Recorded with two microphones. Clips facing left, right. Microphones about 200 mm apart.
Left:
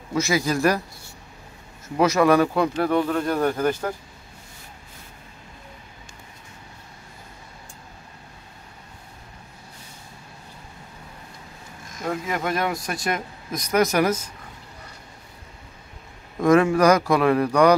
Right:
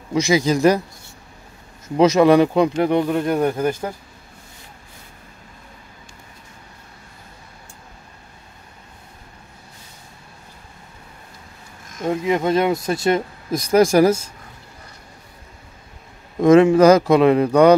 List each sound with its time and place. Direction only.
0.1 s speech: 20° right (ahead or behind)
2.0 s speech: 20° right (ahead or behind)
12.0 s speech: 25° right (ahead or behind)
16.3 s speech: 20° right (ahead or behind)